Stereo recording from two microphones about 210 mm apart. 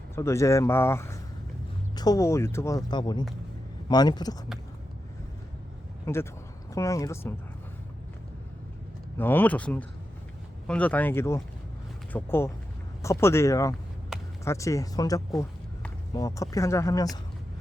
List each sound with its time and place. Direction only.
0.2 s speech: 15° left (ahead or behind)
6.7 s speech: 15° left (ahead or behind)
9.1 s speech: 10° left (ahead or behind)
14.1 s a sound: centre (ahead or behind)
14.4 s speech: 15° left (ahead or behind)